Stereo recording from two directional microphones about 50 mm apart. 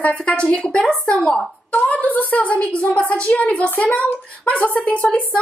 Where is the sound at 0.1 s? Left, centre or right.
Centre.